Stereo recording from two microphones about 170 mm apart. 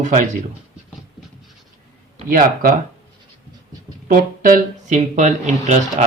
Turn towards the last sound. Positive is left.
turn(degrees=-45)  # may be behind; listen again after turning